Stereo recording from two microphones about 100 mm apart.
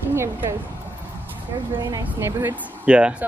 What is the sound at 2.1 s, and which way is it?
Speech, 25° right (ahead or behind).